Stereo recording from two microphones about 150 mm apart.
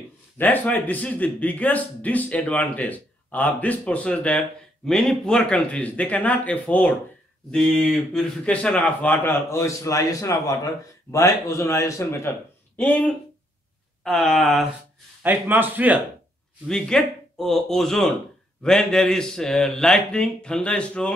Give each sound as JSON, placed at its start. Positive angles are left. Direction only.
{"t": 0.4, "sound": "a man's voice", "side_deg": 10}
{"t": 15.2, "sound": "a man's voice", "side_deg": -10}
{"t": 16.6, "sound": "a man's voice", "side_deg": 5}